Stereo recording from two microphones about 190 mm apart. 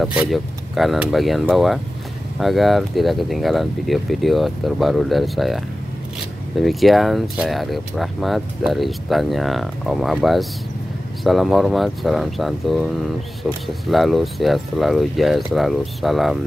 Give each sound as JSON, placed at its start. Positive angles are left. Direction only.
{"t": 0.0, "sound": "speech", "side_deg": -5}